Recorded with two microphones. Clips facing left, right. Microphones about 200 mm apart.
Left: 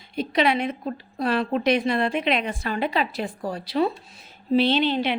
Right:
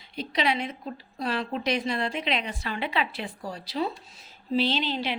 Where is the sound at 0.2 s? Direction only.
55° left (ahead or behind).